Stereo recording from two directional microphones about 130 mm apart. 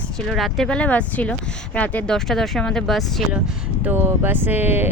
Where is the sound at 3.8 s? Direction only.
15° right (ahead or behind).